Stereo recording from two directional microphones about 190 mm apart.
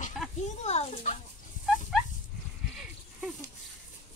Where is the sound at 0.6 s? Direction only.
35° left (ahead or behind).